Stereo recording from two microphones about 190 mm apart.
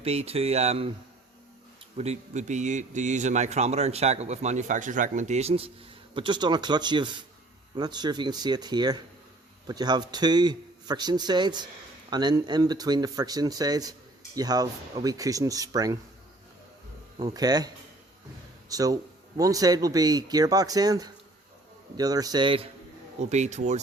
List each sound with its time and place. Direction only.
0.0 s speech: 30° right (ahead or behind)
2.0 s a man's voice: 35° right (ahead or behind); by 16.0 s 20° right (ahead or behind)
17.2 s a man's voice: 20° right (ahead or behind)
18.7 s a man's voice: 20° right (ahead or behind); by 23.8 s 35° right (ahead or behind)